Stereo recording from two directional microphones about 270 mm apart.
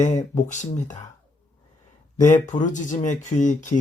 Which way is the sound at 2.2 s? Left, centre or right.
Left.